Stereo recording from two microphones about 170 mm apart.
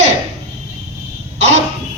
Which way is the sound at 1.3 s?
40° right (ahead or behind).